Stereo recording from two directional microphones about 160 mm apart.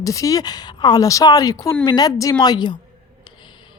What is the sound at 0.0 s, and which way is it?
Speech, 20° left (ahead or behind).